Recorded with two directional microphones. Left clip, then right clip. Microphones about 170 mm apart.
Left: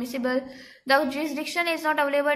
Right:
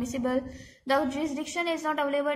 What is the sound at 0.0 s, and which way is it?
A woman's voice, 5° right (ahead or behind).